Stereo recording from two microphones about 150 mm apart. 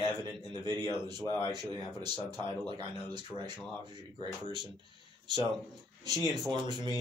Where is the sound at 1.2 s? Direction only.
25° left (ahead or behind).